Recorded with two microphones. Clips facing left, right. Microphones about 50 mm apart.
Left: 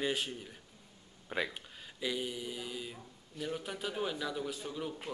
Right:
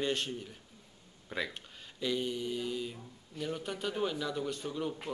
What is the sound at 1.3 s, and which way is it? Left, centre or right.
Speech, left.